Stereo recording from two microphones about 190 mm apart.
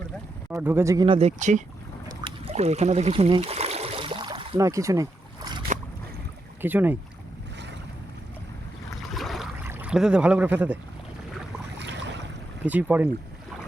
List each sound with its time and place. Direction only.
0.5 s speech: 10° right (ahead or behind)
1.0 s speech: 25° right (ahead or behind)
1.4 s speech: 40° right (ahead or behind)
2.2 s boat: 30° right (ahead or behind)
4.5 s a sound: 15° right (ahead or behind)
6.6 s speech: 10° right (ahead or behind)
9.1 s a sound: centre (ahead or behind)
9.6 s speech: 10° right (ahead or behind)
11.8 s boat: 65° right (ahead or behind)
12.6 s speech: 10° right (ahead or behind)